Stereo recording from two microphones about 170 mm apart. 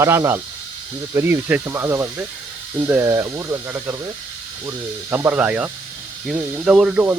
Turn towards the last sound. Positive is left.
turn(degrees=-10)  # may be behind; listen again after turning